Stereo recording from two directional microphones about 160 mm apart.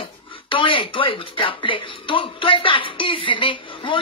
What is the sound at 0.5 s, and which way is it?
Speech, 30° left (ahead or behind).